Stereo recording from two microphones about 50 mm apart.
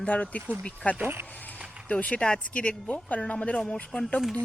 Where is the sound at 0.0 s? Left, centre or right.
Left.